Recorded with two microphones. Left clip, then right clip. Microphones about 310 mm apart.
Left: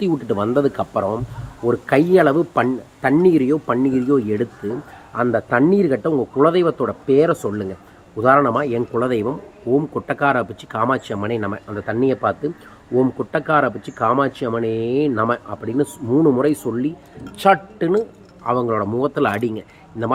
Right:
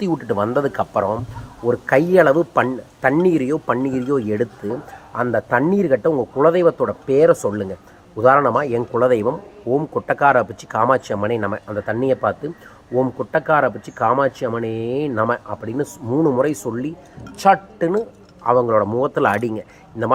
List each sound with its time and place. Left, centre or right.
0.3 s speech: centre